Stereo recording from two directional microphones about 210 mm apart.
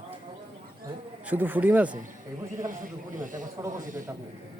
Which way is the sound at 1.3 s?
10° right (ahead or behind).